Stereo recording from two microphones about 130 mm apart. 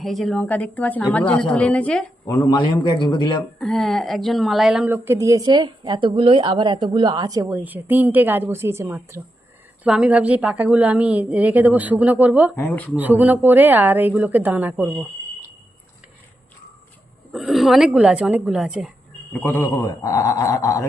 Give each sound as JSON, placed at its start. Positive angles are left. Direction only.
{"t": 0.0, "sound": "speech", "side_deg": 0}
{"t": 2.2, "sound": "a man's voice", "side_deg": 25}
{"t": 3.6, "sound": "speech", "side_deg": 0}
{"t": 4.9, "sound": "a woman's voice", "side_deg": -20}
{"t": 7.5, "sound": "a woman's voice", "side_deg": -15}
{"t": 9.8, "sound": "a woman's voice", "side_deg": -5}
{"t": 12.5, "sound": "speech", "side_deg": 15}
{"t": 13.0, "sound": "a woman's voice", "side_deg": -10}
{"t": 17.3, "sound": "speech", "side_deg": 0}
{"t": 19.3, "sound": "a man's voice", "side_deg": 15}